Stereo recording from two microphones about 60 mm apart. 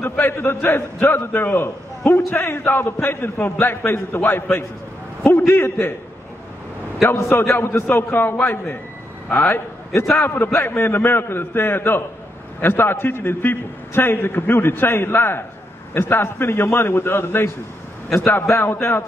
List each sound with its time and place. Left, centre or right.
0.2 s a man's voice: left
7.2 s a man's voice: left